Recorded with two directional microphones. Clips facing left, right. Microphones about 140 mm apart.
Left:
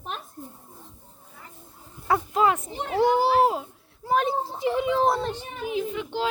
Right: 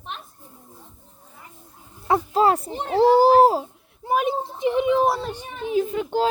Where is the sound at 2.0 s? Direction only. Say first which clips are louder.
Right 3 dB; 30° right (ahead or behind).